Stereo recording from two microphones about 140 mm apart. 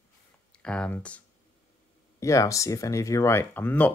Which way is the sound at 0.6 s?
10° left (ahead or behind).